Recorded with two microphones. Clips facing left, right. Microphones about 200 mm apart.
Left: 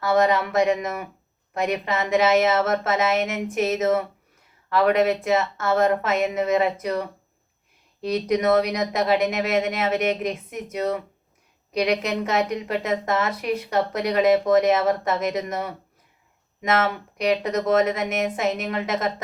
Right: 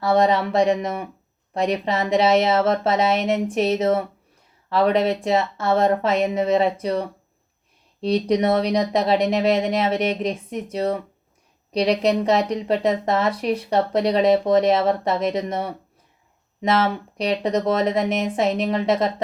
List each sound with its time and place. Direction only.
0.0 s speech: 30° right (ahead or behind)